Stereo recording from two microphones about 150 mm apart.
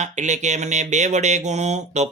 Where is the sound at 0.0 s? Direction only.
50° right (ahead or behind).